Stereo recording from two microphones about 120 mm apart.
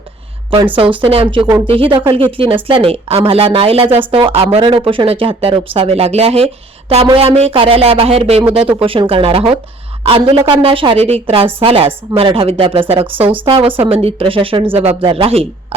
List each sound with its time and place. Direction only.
0.5 s speech: 45° right (ahead or behind)
12.9 s a woman's voice: 15° right (ahead or behind)
13.4 s speech: 45° right (ahead or behind)